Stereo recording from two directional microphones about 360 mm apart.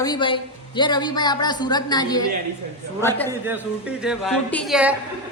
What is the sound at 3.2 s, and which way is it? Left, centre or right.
Speech, centre.